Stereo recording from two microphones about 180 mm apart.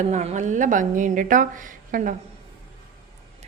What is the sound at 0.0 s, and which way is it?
A woman's voice, 40° right (ahead or behind).